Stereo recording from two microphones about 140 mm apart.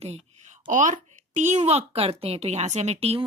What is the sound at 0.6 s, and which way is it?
A child's voice, 65° right (ahead or behind).